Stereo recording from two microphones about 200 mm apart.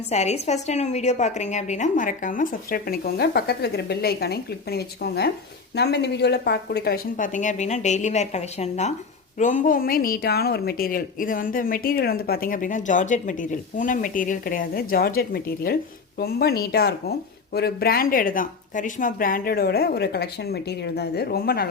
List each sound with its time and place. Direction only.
0.1 s a woman's voice: 35° left (ahead or behind); by 21.7 s 50° left (ahead or behind)